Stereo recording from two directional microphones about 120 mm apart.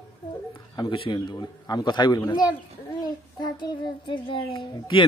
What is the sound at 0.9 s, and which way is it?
A child's voice, 45° left (ahead or behind).